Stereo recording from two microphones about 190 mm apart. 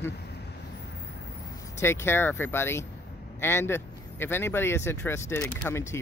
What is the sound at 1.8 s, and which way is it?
Speech, 10° left (ahead or behind).